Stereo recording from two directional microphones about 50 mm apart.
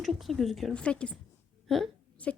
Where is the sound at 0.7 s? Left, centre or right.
Left.